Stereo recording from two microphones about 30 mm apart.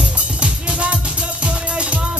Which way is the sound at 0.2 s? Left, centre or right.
Right.